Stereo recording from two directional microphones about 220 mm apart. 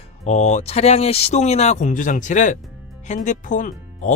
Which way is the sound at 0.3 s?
30° left (ahead or behind).